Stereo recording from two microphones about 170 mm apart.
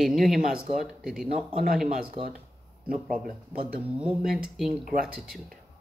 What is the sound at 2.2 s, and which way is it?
Speech, 30° right (ahead or behind).